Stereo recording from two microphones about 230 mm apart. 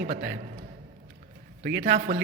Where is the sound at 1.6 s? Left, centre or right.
Right.